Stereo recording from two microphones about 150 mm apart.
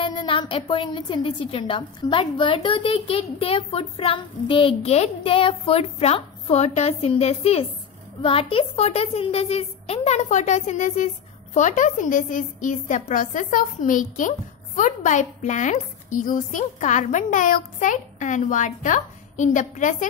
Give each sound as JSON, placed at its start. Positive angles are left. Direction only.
{"t": 0.0, "sound": "a woman's voice", "side_deg": 35}